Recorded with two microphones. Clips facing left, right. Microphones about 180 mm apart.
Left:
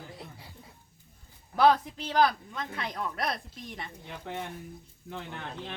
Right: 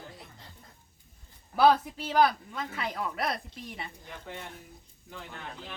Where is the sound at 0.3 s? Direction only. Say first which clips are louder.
Left 3 dB; 10° left (ahead or behind).